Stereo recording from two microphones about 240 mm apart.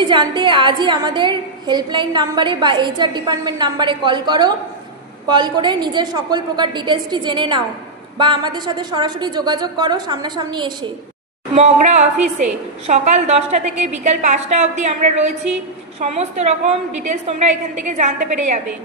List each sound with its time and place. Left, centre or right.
0.0 s a woman's voice: centre